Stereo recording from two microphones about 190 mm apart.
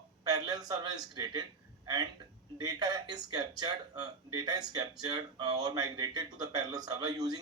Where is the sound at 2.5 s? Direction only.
20° right (ahead or behind).